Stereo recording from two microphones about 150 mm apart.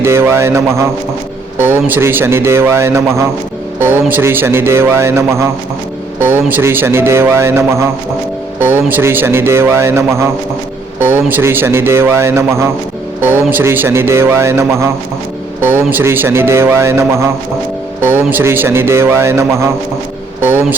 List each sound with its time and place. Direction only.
0.0 s mantra: 15° right (ahead or behind)
1.5 s a man's voice: 15° right (ahead or behind)